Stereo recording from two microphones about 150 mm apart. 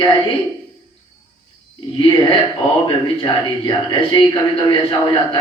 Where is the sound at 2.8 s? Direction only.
35° left (ahead or behind).